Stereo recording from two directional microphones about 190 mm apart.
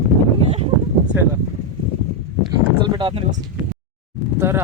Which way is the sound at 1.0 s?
10° right (ahead or behind).